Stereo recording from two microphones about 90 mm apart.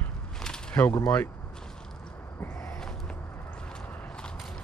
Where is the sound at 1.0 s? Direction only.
15° left (ahead or behind).